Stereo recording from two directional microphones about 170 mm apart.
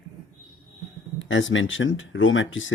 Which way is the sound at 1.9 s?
90° left.